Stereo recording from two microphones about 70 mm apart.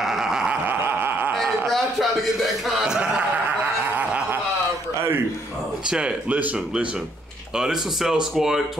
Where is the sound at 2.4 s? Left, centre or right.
Centre.